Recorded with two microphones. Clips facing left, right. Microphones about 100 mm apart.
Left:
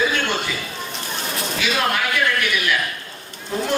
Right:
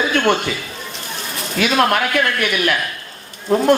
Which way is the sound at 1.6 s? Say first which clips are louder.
Right 7 dB; 55° right (ahead or behind).